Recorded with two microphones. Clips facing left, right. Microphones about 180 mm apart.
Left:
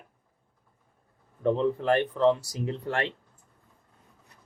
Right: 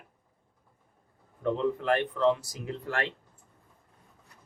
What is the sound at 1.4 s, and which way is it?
Speech, 30° left (ahead or behind).